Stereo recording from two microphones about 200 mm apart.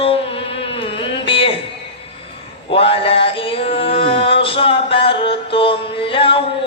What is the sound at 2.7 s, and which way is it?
Male singing, 30° left (ahead or behind).